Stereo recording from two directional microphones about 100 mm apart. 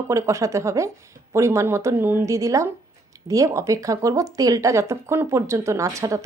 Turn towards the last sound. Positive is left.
turn(degrees=-35)  # may be behind; listen again after turning